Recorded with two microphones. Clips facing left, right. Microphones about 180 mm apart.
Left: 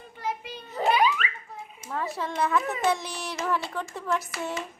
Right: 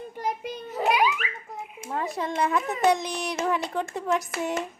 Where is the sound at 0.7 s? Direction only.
5° right (ahead or behind).